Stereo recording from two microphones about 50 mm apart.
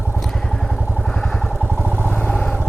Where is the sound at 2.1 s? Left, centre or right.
Left.